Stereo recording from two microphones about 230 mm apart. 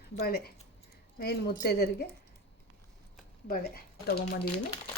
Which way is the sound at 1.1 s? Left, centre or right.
Left.